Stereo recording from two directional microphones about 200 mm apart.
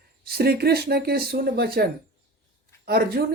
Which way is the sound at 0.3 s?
50° right (ahead or behind).